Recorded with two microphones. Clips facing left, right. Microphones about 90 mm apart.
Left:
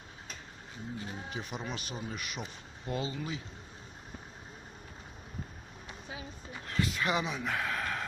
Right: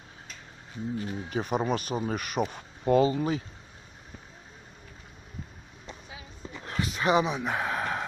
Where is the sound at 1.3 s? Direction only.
50° right (ahead or behind).